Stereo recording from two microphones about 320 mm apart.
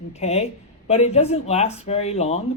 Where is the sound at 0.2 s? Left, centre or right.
Centre.